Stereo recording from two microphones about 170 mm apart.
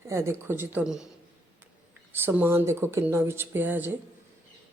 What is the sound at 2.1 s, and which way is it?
Speech, 10° right (ahead or behind).